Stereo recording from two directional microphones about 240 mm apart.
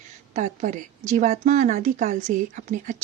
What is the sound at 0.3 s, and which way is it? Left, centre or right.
Speech, right.